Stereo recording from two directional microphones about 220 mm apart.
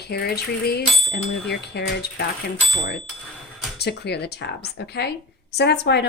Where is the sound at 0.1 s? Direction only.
45° left (ahead or behind).